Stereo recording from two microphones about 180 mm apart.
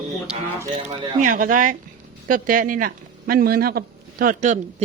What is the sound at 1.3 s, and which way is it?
A man's voice, 50° right (ahead or behind).